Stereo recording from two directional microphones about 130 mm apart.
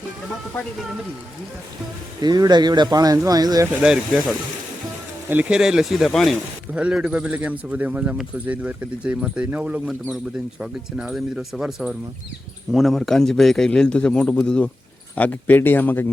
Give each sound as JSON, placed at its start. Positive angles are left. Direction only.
{"t": 2.2, "sound": "speech", "side_deg": -35}
{"t": 3.8, "sound": "speech", "side_deg": -5}
{"t": 5.3, "sound": "a man's voice", "side_deg": -10}